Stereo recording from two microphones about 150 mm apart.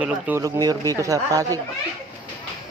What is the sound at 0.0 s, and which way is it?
Speech, 10° right (ahead or behind).